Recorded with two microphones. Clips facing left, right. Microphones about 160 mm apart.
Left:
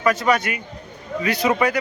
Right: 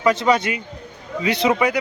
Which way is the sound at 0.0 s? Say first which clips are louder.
Right 2 dB; 25° right (ahead or behind).